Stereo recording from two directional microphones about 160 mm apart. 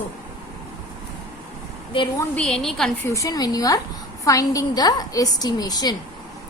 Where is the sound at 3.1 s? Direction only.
20° left (ahead or behind).